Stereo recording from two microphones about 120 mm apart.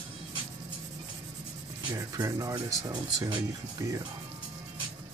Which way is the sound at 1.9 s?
30° right (ahead or behind).